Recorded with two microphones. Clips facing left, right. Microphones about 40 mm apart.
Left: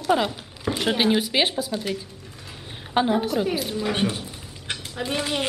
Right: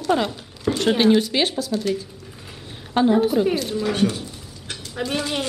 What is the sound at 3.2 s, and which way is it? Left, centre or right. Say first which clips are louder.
Speech: right 5 dB; centre.